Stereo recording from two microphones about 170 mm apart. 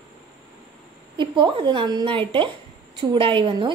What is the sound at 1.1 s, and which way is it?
A woman's voice, 30° right (ahead or behind).